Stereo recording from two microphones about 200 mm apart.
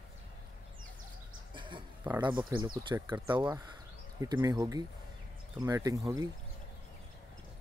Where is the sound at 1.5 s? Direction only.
25° right (ahead or behind).